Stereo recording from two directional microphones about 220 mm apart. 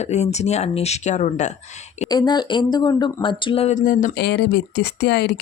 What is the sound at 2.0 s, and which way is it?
Speech, 20° left (ahead or behind).